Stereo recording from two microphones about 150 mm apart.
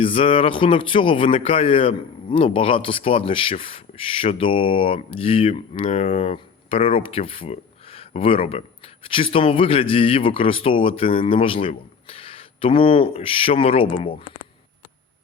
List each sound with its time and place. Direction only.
0.0 s speech: 35° left (ahead or behind)